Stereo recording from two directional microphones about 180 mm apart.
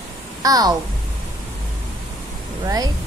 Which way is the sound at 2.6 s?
20° right (ahead or behind).